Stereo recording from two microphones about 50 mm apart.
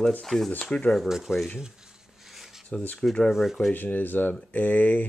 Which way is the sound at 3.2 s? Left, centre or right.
Centre.